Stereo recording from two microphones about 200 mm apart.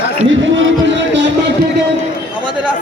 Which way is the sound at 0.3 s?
70° right (ahead or behind).